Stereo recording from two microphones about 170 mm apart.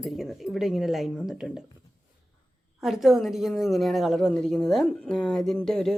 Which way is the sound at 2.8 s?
Centre (ahead or behind).